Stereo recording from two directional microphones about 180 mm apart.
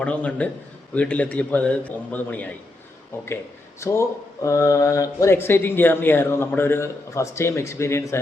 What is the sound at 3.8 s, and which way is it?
Speech, 15° left (ahead or behind).